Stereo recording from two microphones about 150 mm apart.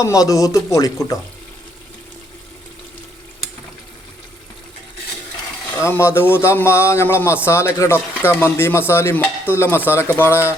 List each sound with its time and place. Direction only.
0.0 s speech: 20° left (ahead or behind)
5.7 s speech: 20° left (ahead or behind)